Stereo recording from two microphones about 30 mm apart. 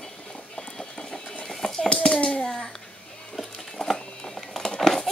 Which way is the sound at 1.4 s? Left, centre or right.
Centre.